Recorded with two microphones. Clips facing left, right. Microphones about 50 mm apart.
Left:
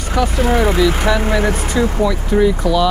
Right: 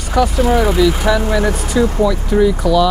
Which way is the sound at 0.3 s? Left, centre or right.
Left.